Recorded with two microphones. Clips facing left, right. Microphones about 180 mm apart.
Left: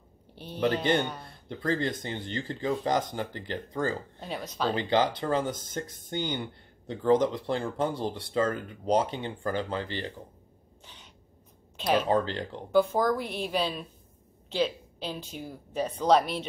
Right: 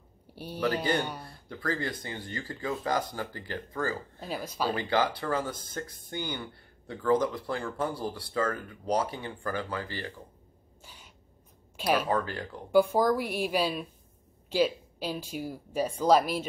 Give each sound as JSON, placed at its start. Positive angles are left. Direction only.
{"t": 0.3, "sound": "a sound", "side_deg": -10}
{"t": 1.2, "sound": "speech", "side_deg": 20}
{"t": 4.2, "sound": "speech", "side_deg": -5}
{"t": 4.7, "sound": "speech", "side_deg": 20}
{"t": 10.8, "sound": "a sound", "side_deg": -10}
{"t": 11.7, "sound": "speech", "side_deg": -10}
{"t": 12.1, "sound": "speech", "side_deg": 25}
{"t": 12.7, "sound": "speech", "side_deg": -10}